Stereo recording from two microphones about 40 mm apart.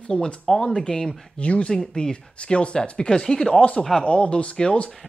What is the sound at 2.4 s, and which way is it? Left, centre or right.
Speech, left.